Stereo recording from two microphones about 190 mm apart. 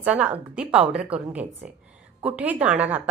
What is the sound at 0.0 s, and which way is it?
A woman's voice, 5° right (ahead or behind).